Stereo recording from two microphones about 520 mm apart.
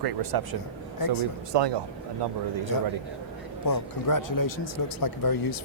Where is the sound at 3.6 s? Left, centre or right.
Left.